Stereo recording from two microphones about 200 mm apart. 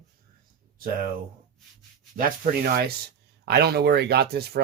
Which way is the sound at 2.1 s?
45° right (ahead or behind).